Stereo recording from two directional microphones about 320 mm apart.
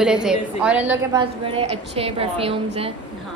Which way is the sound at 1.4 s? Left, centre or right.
Centre.